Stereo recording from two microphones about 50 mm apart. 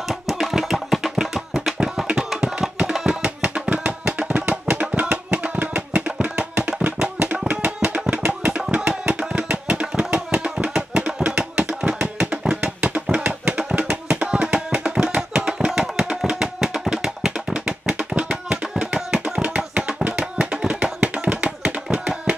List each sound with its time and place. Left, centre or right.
0.1 s music: centre
2.9 s music: centre; by 8.4 s right
8.5 s tabla: right
12.9 s music: right
19.2 s music: right
21.0 s a sound: right
21.9 s hands: centre